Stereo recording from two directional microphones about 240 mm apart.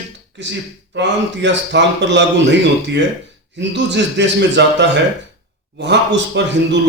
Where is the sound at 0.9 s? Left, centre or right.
Right.